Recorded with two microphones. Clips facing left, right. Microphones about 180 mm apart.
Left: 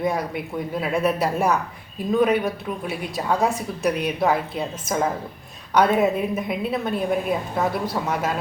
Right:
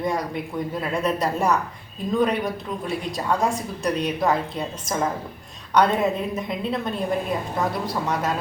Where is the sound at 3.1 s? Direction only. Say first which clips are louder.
Left 2 dB; 5° left (ahead or behind).